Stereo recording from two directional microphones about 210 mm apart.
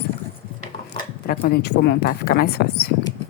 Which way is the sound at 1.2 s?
45° left (ahead or behind).